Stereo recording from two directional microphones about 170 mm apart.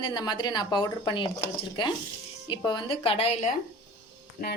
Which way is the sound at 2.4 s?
25° left (ahead or behind).